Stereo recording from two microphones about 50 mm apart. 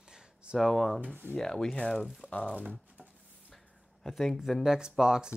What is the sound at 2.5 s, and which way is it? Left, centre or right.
Speech, right.